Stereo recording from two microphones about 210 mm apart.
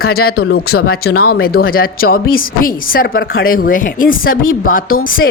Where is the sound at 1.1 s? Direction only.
90° left.